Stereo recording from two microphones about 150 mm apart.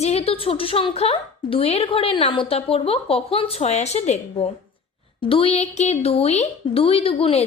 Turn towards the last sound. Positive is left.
turn(degrees=40)  # may be behind; listen again after turning